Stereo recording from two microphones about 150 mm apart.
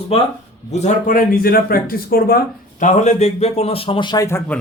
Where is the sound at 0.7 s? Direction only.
50° left (ahead or behind); by 2.8 s 85° left.